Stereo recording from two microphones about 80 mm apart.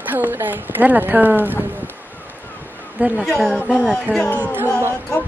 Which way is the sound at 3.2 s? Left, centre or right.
Centre.